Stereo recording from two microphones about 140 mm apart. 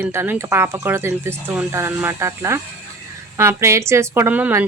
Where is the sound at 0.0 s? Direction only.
15° right (ahead or behind).